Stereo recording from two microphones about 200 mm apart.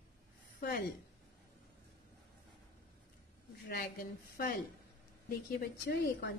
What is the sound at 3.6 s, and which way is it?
Speech, 50° left (ahead or behind).